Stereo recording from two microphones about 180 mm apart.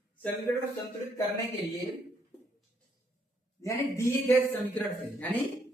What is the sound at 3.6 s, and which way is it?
Speech, 15° left (ahead or behind).